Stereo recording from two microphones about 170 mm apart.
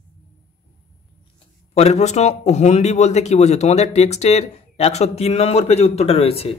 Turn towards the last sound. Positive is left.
turn(degrees=35)  # may be behind; listen again after turning